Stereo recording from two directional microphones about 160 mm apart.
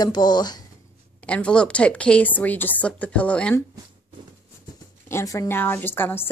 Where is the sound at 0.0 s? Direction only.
25° left (ahead or behind).